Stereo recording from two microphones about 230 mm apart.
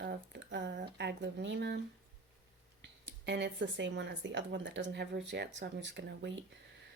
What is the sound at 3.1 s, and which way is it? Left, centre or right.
Speech, right.